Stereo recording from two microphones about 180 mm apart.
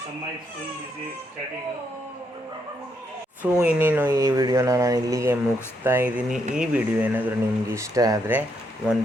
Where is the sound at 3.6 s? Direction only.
10° right (ahead or behind).